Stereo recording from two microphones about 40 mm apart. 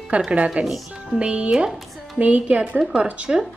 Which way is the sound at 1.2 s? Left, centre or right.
Right.